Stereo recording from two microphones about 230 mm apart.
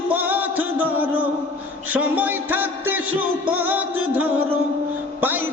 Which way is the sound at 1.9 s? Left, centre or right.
Centre.